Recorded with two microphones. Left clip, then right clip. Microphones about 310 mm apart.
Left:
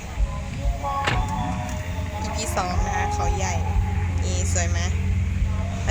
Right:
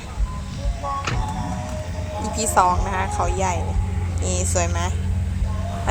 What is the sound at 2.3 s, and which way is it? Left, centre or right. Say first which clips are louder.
Speech: right 9 dB; centre.